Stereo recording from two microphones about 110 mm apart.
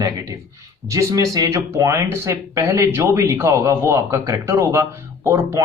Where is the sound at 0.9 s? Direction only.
30° right (ahead or behind).